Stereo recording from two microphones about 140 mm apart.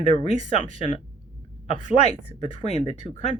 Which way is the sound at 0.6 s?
40° left (ahead or behind).